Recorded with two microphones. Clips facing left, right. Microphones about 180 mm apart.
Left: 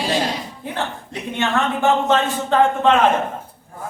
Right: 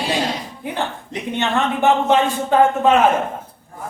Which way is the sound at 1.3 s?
15° right (ahead or behind).